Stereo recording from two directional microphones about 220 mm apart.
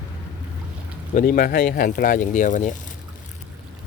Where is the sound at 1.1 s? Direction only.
40° left (ahead or behind).